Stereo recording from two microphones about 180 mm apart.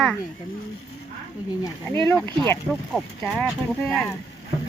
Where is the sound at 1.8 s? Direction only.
10° left (ahead or behind).